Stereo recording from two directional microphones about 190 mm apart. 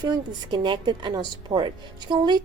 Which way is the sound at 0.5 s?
25° right (ahead or behind).